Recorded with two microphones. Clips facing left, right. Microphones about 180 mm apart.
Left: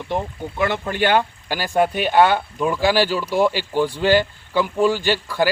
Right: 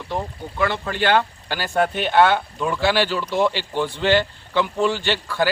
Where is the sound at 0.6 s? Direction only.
15° left (ahead or behind).